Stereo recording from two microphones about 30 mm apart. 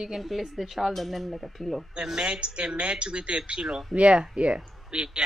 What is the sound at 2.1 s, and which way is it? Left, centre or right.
A man's voice, right.